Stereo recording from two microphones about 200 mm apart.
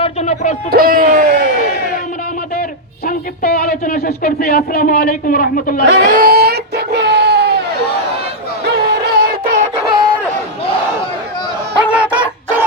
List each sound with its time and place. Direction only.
0.0 s a sound: 35° left (ahead or behind)
0.7 s speech: 45° right (ahead or behind)
3.1 s speech: 50° left (ahead or behind)
5.8 s speech: 60° right (ahead or behind)
6.1 s a sound: 45° right (ahead or behind)
8.8 s music: 50° right (ahead or behind)
11.8 s chicken: 5° right (ahead or behind)